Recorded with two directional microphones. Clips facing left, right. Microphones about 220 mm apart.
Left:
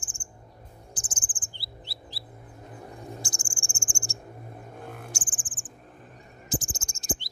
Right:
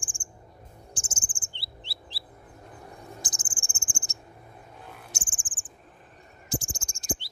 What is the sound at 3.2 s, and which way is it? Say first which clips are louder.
Cricket: left 3 dB; 20° right (ahead or behind).